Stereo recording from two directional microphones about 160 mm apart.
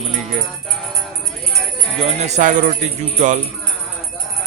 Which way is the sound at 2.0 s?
45° right (ahead or behind).